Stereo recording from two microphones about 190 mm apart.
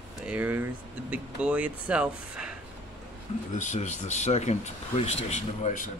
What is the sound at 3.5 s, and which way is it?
Speech, 40° left (ahead or behind).